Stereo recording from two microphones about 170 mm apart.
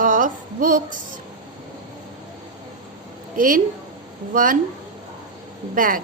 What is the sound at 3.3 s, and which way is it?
Speech, 55° right (ahead or behind).